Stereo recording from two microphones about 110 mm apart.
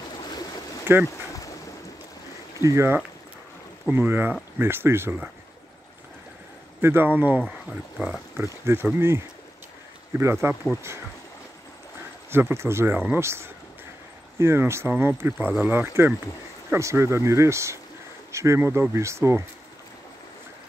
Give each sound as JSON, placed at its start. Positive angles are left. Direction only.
{"t": 2.6, "sound": "speech", "side_deg": -25}
{"t": 6.8, "sound": "speech", "side_deg": -20}
{"t": 8.4, "sound": "speech", "side_deg": -20}
{"t": 12.3, "sound": "speech", "side_deg": -20}